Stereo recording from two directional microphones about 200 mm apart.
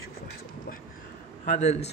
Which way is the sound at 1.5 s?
35° left (ahead or behind).